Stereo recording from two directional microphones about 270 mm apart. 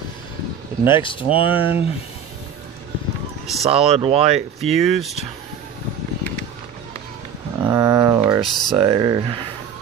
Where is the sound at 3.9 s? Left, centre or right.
Right.